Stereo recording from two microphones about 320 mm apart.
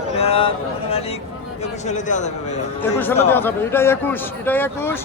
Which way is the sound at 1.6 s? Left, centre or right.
Left.